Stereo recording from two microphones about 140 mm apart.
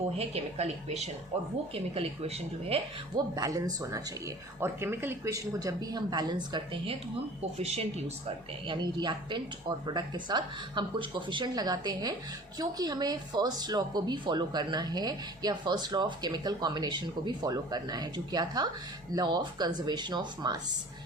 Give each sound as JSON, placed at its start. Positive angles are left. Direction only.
{"t": 0.2, "sound": "a woman's voice", "side_deg": -50}
{"t": 3.3, "sound": "speech", "side_deg": -25}
{"t": 7.6, "sound": "a woman's voice", "side_deg": -50}
{"t": 8.6, "sound": "a woman's voice", "side_deg": -35}